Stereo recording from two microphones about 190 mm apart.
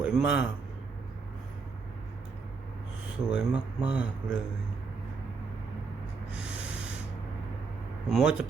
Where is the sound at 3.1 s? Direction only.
5° right (ahead or behind).